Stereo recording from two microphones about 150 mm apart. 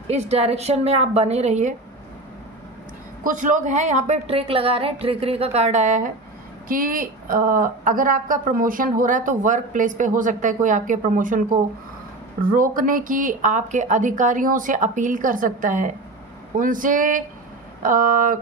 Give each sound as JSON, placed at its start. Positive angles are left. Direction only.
{"t": 0.1, "sound": "a woman's voice", "side_deg": -45}
{"t": 3.3, "sound": "a woman's voice", "side_deg": -60}
{"t": 12.4, "sound": "a woman's voice", "side_deg": -65}